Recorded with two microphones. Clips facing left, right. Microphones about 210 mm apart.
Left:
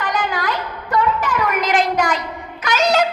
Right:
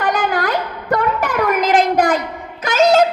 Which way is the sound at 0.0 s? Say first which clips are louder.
Right 4 dB; 55° right (ahead or behind).